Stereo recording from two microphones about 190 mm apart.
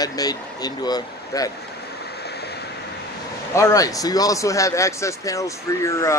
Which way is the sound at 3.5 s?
15° left (ahead or behind).